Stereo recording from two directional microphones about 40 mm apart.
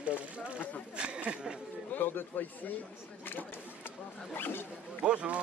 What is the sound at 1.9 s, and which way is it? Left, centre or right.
Speech, left.